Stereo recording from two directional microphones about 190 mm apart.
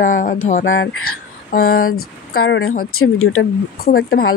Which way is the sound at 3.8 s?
50° left (ahead or behind).